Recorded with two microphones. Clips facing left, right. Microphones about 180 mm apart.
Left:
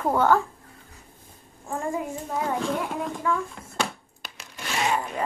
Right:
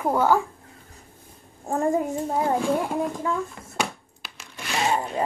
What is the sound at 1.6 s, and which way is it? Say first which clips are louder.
Child singing: right 6 dB; 40° right (ahead or behind).